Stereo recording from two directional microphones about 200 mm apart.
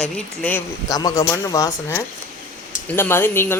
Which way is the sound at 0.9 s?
20° left (ahead or behind).